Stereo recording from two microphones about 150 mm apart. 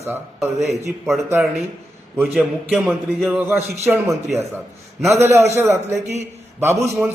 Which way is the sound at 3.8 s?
15° right (ahead or behind).